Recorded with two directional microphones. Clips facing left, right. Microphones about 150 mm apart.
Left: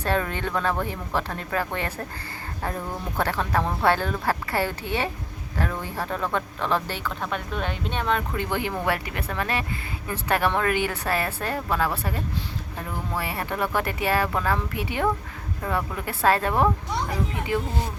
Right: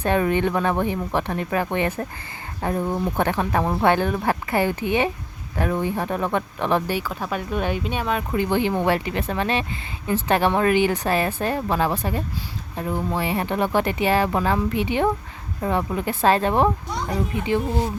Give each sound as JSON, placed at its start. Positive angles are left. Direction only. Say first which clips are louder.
{"t": 0.0, "sound": "a woman's voice", "louder": "right 6 dB", "side_deg": -15}
{"t": 8.4, "sound": "a woman's voice", "louder": "right 7 dB", "side_deg": -25}